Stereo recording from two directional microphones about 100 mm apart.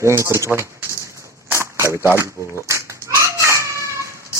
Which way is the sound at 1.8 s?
25° left (ahead or behind).